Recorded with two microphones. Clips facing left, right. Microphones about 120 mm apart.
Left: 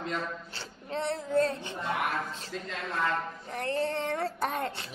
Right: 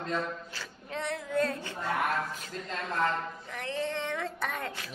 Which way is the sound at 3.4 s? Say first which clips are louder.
Left 5 dB; 40° left (ahead or behind).